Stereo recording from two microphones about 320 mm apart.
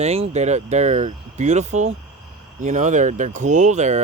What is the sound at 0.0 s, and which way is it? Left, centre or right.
Speech, centre.